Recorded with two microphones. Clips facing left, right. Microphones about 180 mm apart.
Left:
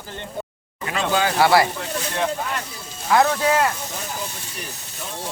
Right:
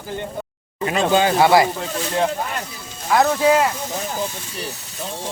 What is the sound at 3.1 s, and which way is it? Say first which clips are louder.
Speech: right 2 dB; 5° right (ahead or behind).